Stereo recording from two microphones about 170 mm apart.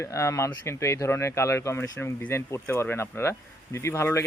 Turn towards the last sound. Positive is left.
turn(degrees=15)  # may be behind; listen again after turning